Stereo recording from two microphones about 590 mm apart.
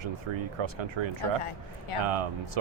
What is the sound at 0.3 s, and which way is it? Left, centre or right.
Speech, right.